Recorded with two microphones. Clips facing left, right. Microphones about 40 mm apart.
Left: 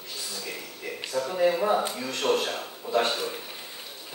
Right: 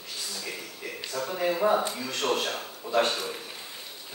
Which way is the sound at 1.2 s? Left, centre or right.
Centre.